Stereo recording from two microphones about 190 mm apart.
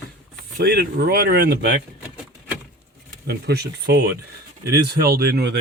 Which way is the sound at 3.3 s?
60° right (ahead or behind).